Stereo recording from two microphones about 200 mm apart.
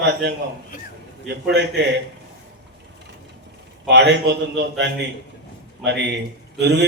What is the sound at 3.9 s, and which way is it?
Speech, 60° right (ahead or behind).